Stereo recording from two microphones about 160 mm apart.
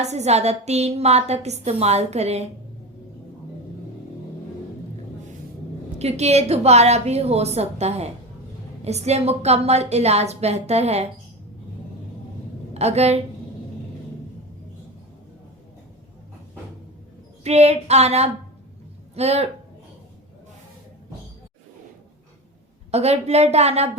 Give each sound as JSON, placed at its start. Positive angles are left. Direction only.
{"t": 0.0, "sound": "a woman's voice", "side_deg": -45}
{"t": 6.0, "sound": "a woman's voice", "side_deg": -40}
{"t": 12.7, "sound": "a woman's voice", "side_deg": -40}
{"t": 17.4, "sound": "a woman's voice", "side_deg": -40}
{"t": 22.9, "sound": "a woman's voice", "side_deg": -40}